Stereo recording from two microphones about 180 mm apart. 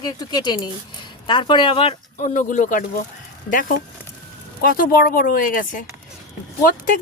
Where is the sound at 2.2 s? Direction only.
45° left (ahead or behind).